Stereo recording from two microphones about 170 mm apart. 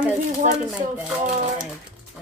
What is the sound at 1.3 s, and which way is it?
Speech, 45° right (ahead or behind).